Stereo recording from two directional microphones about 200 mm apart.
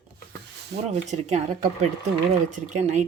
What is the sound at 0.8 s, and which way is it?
Speech, 35° right (ahead or behind).